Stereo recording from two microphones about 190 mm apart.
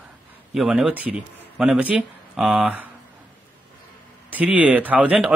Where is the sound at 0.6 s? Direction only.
5° right (ahead or behind).